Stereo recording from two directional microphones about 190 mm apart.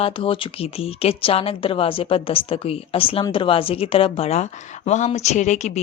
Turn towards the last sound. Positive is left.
turn(degrees=35)  # may be behind; listen again after turning